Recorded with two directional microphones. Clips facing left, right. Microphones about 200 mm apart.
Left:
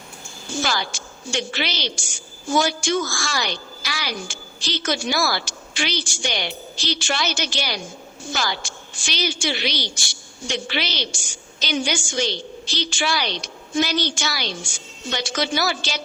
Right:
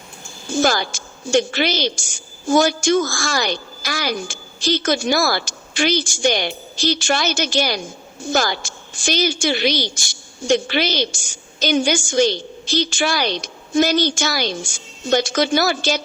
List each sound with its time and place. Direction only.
0.5 s a woman's voice: 45° right (ahead or behind)